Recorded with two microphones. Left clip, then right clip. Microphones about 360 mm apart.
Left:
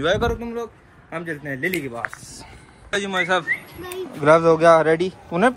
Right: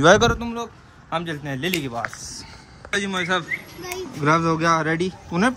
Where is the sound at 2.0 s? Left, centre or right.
Centre.